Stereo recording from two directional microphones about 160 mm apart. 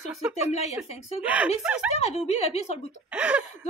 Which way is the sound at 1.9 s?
40° left (ahead or behind).